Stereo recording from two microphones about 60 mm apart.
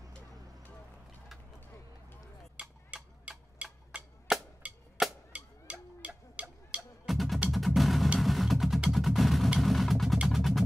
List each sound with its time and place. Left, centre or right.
2.6 s a sound: right
3.9 s music: centre
4.3 s a sound: centre
5.3 s music: right
7.1 s music: centre
9.6 s vehicle: centre
10.2 s music: centre